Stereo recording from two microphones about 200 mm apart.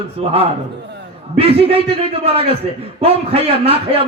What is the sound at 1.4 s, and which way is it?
A man's voice, 30° right (ahead or behind).